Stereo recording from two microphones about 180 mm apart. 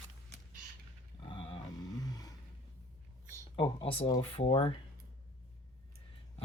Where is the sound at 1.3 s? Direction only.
30° left (ahead or behind).